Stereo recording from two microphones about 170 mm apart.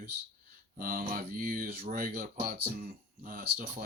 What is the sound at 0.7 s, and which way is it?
Speech, 55° right (ahead or behind).